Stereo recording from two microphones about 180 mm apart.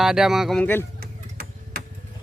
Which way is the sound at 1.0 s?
55° right (ahead or behind).